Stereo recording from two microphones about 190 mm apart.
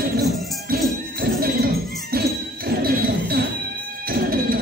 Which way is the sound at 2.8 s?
55° right (ahead or behind).